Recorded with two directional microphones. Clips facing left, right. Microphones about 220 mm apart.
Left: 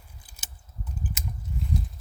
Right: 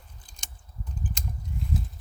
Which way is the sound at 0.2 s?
5° left (ahead or behind).